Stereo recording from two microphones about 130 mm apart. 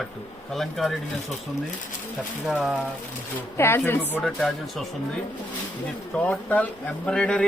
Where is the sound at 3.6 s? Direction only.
15° left (ahead or behind).